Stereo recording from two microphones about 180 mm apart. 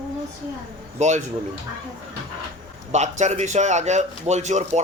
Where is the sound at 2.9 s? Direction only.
40° right (ahead or behind).